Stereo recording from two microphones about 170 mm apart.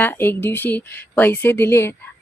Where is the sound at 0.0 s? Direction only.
10° left (ahead or behind).